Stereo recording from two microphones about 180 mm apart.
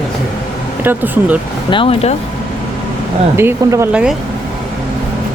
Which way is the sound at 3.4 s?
15° right (ahead or behind).